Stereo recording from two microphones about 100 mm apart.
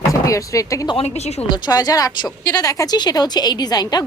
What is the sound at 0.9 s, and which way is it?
Speech, 80° left.